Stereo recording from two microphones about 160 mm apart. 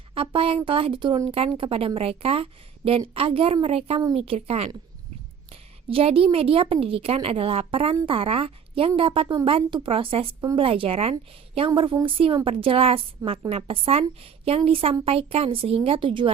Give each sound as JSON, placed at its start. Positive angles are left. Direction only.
{"t": 0.1, "sound": "a woman's voice", "side_deg": -35}
{"t": 5.9, "sound": "a woman's voice", "side_deg": -35}